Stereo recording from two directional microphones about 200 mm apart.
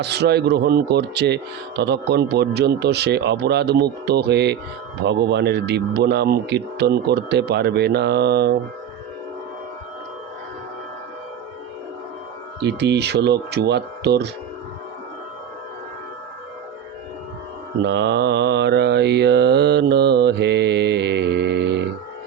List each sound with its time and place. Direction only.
0.0 s speech: 55° right (ahead or behind)
12.6 s speech: 55° right (ahead or behind)
17.8 s mantra: 60° right (ahead or behind)